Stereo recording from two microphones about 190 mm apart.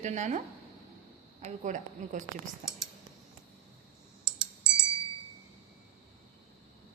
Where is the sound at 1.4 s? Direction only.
40° right (ahead or behind).